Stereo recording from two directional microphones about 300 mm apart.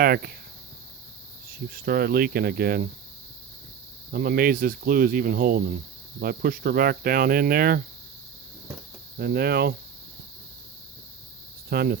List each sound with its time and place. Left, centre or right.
0.0 s speech: right
1.7 s speech: right
4.1 s speech: right
9.1 s speech: right
11.7 s speech: right